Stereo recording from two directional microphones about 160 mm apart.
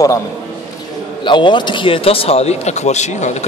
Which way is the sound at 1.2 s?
30° left (ahead or behind).